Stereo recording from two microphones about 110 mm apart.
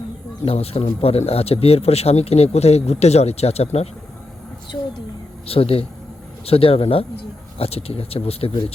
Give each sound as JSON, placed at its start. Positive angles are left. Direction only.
{"t": 0.4, "sound": "speech", "side_deg": 65}
{"t": 5.5, "sound": "speech", "side_deg": 60}